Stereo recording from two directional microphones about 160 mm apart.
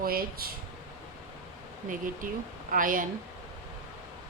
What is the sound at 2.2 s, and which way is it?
Speech, 55° right (ahead or behind).